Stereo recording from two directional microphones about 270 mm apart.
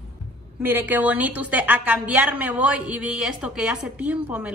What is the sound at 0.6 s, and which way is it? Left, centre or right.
A woman's voice, centre.